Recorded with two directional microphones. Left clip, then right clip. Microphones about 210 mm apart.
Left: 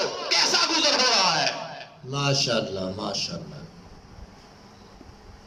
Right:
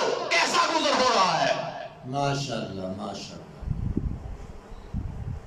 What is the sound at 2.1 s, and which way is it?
A man's voice, 50° left (ahead or behind).